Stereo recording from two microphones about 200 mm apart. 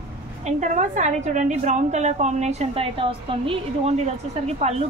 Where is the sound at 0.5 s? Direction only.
35° right (ahead or behind).